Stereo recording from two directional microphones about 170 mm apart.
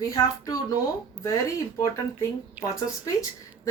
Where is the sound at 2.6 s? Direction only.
20° left (ahead or behind).